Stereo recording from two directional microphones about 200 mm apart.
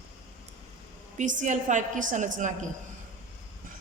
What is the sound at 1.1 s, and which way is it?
A woman's voice, 40° right (ahead or behind).